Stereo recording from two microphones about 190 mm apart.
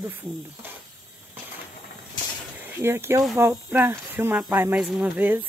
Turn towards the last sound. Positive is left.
turn(degrees=-10)  # may be behind; listen again after turning